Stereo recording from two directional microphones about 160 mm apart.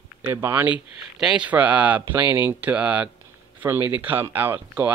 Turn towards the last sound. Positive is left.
turn(degrees=-10)  # may be behind; listen again after turning